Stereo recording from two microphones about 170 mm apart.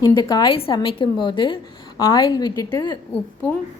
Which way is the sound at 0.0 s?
25° left (ahead or behind).